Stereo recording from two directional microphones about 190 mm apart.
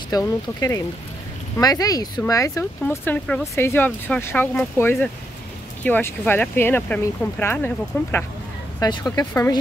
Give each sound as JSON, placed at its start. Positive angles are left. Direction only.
{"t": 0.1, "sound": "speech", "side_deg": 20}
{"t": 8.7, "sound": "speech", "side_deg": 20}